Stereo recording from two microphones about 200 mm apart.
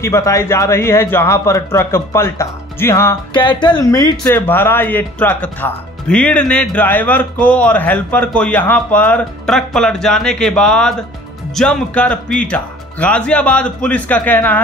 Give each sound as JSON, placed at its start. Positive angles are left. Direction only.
{"t": 0.0, "sound": "speech", "side_deg": 15}